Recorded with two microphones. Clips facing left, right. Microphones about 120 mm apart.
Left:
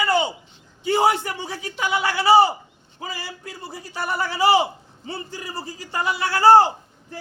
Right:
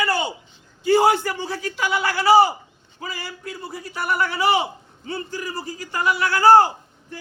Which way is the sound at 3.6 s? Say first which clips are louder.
Right 1 dB; 30° left (ahead or behind).